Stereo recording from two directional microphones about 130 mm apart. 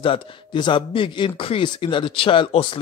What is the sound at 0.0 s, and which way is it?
Speech, 40° left (ahead or behind).